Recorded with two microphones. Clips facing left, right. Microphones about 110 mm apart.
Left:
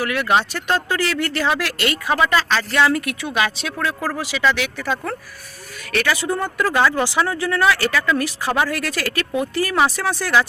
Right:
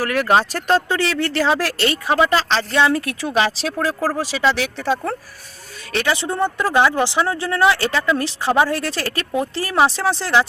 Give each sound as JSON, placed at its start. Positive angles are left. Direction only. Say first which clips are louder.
{"t": 0.0, "sound": "speech", "louder": "right 2 dB", "side_deg": -40}